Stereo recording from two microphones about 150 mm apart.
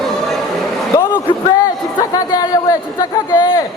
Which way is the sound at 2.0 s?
25° left (ahead or behind).